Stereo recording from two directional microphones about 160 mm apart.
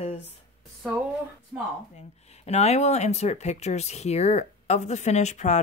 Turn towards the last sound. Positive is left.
turn(degrees=45)  # may be behind; listen again after turning